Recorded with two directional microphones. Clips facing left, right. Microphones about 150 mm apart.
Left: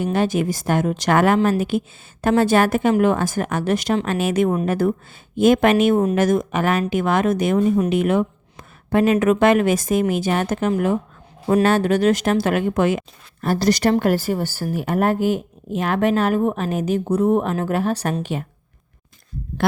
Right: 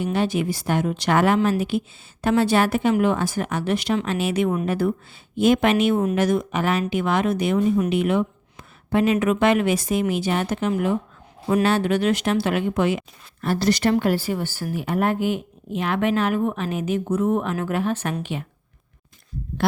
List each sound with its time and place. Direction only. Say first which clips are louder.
0.0 s speech: left 3 dB; 45° left (ahead or behind)